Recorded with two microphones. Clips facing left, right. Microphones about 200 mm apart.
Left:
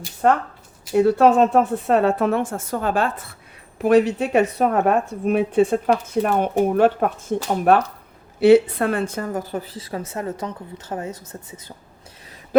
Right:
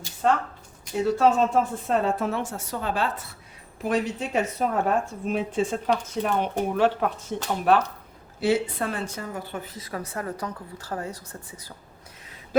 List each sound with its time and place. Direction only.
0.2 s a woman's voice: 55° left (ahead or behind)
3.8 s a woman's voice: 65° left (ahead or behind); by 7.8 s 50° left (ahead or behind)
8.4 s a woman's voice: 65° left (ahead or behind); by 11.7 s 20° left (ahead or behind)